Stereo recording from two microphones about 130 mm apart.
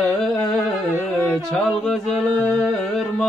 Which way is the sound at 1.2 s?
5° left (ahead or behind).